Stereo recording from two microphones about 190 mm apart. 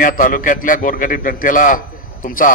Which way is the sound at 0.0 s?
50° left (ahead or behind).